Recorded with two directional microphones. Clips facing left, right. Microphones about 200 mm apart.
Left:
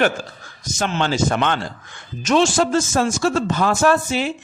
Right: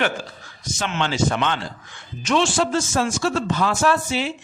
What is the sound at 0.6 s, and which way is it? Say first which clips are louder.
Speech: left 3 dB; 45° left (ahead or behind).